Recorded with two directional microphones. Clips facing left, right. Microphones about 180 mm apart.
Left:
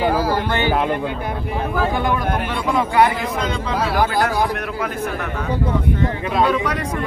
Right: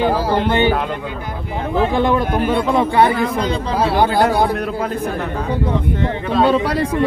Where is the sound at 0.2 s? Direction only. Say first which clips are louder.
Right 4 dB; 25° right (ahead or behind).